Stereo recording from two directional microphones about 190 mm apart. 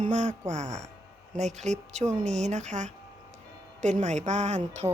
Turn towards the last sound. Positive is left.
turn(degrees=-15)  # may be behind; listen again after turning